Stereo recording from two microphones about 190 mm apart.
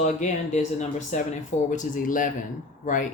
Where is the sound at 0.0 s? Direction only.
40° left (ahead or behind).